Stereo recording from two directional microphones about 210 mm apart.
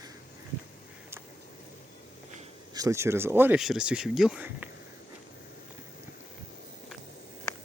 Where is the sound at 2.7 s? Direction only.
15° right (ahead or behind).